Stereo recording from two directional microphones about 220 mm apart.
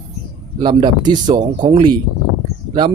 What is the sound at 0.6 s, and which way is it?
Speech, 20° right (ahead or behind).